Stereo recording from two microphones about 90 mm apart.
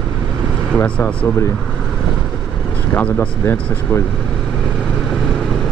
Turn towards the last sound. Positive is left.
turn(degrees=25)  # may be behind; listen again after turning